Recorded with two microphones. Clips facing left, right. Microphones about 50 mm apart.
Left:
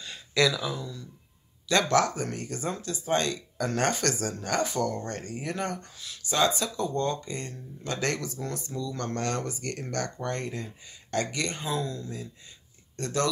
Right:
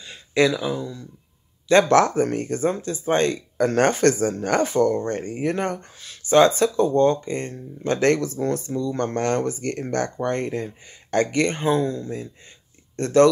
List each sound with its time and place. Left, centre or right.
0.3 s speech: right